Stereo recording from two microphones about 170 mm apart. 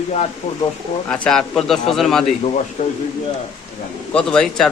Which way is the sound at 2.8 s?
45° left (ahead or behind).